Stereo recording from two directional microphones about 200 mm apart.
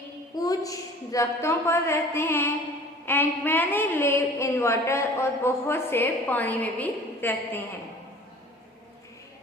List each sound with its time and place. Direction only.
0.3 s a woman's voice: 15° left (ahead or behind)